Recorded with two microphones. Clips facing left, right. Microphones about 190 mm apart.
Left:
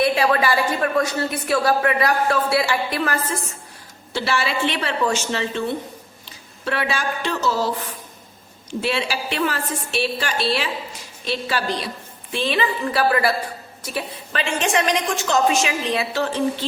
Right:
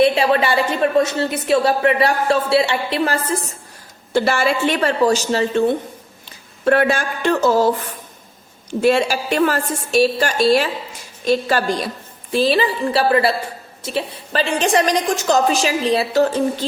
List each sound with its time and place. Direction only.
0.0 s a woman's voice: 25° right (ahead or behind)
4.1 s a woman's voice: 50° right (ahead or behind)
8.8 s a woman's voice: 45° right (ahead or behind)